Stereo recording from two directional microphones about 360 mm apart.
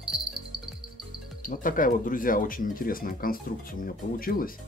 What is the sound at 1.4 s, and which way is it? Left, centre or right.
Speech, left.